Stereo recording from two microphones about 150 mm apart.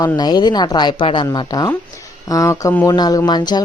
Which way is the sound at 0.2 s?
25° left (ahead or behind).